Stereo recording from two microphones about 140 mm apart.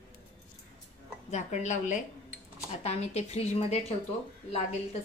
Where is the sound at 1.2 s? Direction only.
55° left (ahead or behind).